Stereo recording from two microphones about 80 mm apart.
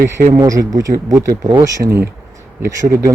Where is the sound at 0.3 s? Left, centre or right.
Right.